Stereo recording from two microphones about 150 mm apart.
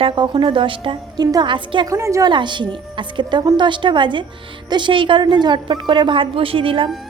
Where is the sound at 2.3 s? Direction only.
30° right (ahead or behind).